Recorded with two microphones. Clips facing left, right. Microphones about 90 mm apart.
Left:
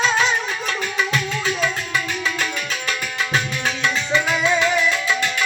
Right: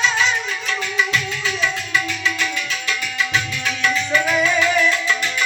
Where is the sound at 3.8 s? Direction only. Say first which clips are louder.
Right 2 dB; 25° left (ahead or behind).